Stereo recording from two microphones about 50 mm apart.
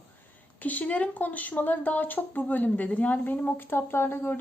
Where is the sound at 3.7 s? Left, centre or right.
Left.